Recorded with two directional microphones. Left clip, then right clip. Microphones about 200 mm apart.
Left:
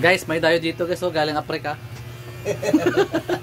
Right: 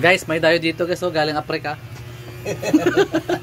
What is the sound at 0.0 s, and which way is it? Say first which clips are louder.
Speech: right 2 dB; 10° left (ahead or behind).